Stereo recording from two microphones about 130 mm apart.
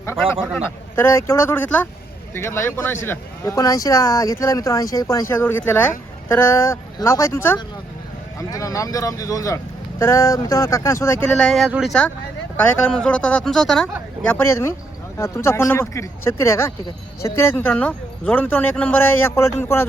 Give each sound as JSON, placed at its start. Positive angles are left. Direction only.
{"t": 0.5, "sound": "speech", "side_deg": 15}
{"t": 11.3, "sound": "speech", "side_deg": 5}
{"t": 12.5, "sound": "speech", "side_deg": 10}
{"t": 14.2, "sound": "speech", "side_deg": 10}